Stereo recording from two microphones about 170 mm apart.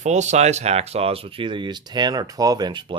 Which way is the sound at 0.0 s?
45° right (ahead or behind).